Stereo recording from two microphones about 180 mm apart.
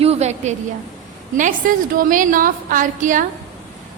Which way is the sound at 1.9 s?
50° right (ahead or behind).